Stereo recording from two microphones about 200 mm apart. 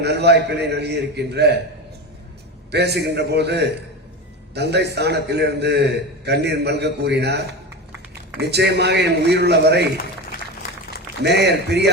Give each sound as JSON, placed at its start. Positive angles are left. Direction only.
{"t": 0.0, "sound": "a man's voice", "side_deg": -55}
{"t": 2.7, "sound": "a man's voice", "side_deg": -55}
{"t": 11.2, "sound": "a man's voice", "side_deg": -55}